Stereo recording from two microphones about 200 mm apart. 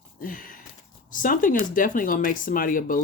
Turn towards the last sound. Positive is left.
turn(degrees=45)  # may be behind; listen again after turning